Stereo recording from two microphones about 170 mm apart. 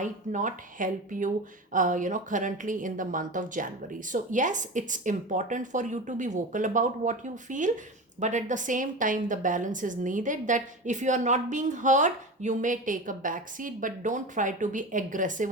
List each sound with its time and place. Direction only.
0.0 s a woman's voice: 50° right (ahead or behind)